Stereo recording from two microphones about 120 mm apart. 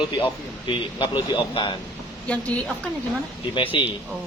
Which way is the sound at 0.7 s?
40° left (ahead or behind).